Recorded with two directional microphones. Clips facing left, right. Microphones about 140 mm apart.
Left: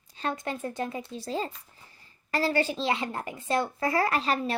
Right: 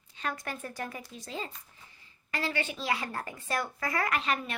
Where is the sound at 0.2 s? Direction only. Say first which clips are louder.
Left 5 dB; 25° left (ahead or behind).